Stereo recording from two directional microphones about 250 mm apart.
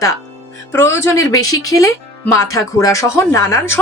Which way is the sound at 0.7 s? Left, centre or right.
Centre.